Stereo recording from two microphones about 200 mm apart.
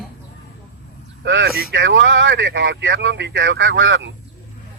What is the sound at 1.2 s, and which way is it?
Speech, 60° right (ahead or behind).